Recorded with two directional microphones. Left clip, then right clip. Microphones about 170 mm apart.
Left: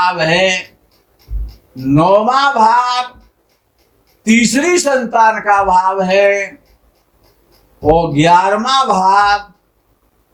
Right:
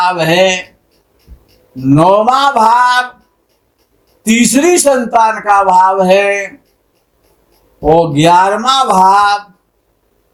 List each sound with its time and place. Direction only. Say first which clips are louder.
0.0 s a man's voice: right 2 dB; 45° right (ahead or behind)
1.9 s a man's voice: right 2 dB; 45° right (ahead or behind)
4.2 s a man's voice: right 2 dB; 45° right (ahead or behind)
7.8 s a man's voice: right 2 dB; 45° right (ahead or behind)